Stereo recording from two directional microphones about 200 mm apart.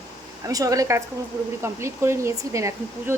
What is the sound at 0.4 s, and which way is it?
Speech, 15° right (ahead or behind).